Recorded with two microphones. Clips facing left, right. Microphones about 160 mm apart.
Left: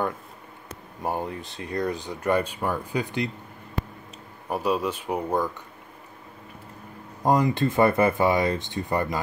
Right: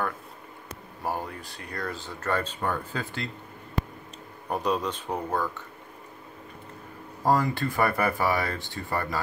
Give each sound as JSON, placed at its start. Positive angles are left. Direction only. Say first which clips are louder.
{"t": 1.0, "sound": "speech", "louder": "left 3 dB", "side_deg": 20}
{"t": 4.5, "sound": "speech", "louder": "left 2 dB", "side_deg": 5}
{"t": 7.2, "sound": "speech", "louder": "left 3 dB", "side_deg": 20}